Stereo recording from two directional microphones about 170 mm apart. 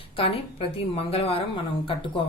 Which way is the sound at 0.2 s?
35° left (ahead or behind).